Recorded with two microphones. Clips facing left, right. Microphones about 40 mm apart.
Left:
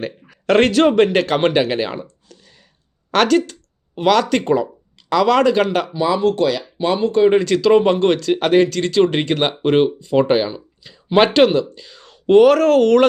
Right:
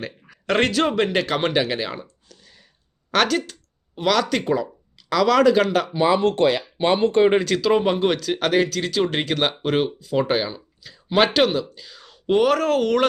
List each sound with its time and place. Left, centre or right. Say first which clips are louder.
0.0 s speech: left 7 dB; centre
3.1 s speech: left 5 dB; centre
3.9 s speech: left 5 dB; centre
5.9 s speech: left 1 dB; right
7.4 s speech: left 6 dB; centre
8.4 s speech: left 5 dB; centre